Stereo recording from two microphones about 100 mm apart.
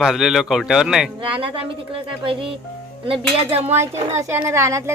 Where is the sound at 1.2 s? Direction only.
65° right (ahead or behind).